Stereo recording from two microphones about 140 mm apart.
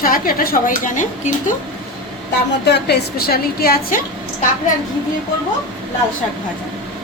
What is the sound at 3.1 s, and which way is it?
Speech, 90° left.